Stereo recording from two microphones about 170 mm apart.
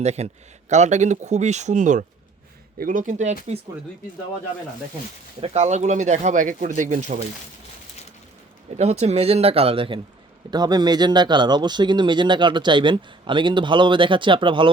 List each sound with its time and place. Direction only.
0.0 s speech: 40° right (ahead or behind)
5.4 s speech: 40° right (ahead or behind)
8.8 s speech: 40° right (ahead or behind)